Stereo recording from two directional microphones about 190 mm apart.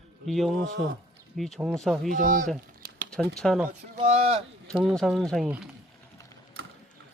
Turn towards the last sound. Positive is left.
turn(degrees=0)  # may be behind; listen again after turning